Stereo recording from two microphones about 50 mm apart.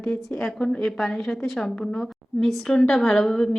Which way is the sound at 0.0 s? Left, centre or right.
Centre.